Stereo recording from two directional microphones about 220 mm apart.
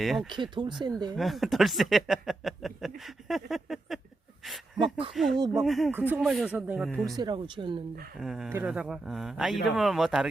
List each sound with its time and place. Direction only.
0.0 s speech: centre (ahead or behind)
0.8 s speech: 20° right (ahead or behind)
1.1 s speech: centre (ahead or behind)
4.8 s speech: 25° right (ahead or behind)
5.1 s speech: centre (ahead or behind)
7.0 s speech: 20° right (ahead or behind)
8.2 s speech: centre (ahead or behind)